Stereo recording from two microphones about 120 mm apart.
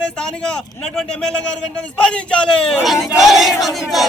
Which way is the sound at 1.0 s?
5° left (ahead or behind).